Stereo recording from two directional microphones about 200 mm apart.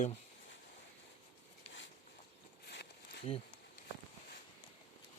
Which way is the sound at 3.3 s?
25° left (ahead or behind).